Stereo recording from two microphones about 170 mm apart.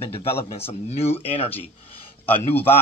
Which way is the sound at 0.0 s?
35° left (ahead or behind).